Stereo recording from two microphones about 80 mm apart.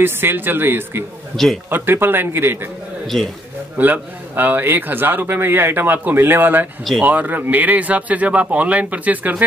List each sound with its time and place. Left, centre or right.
0.0 s a man's voice: right
1.3 s a man's voice: centre
1.7 s a man's voice: right
3.7 s a man's voice: right